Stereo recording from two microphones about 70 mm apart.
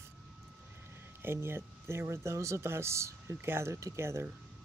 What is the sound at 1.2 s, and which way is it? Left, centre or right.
Speech, right.